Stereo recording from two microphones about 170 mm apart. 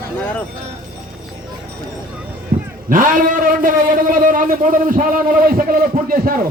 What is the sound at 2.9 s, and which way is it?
A man's voice, 50° right (ahead or behind).